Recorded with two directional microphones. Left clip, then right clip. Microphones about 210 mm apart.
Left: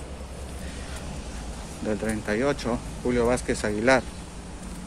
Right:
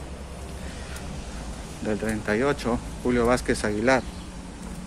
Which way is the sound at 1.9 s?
5° right (ahead or behind).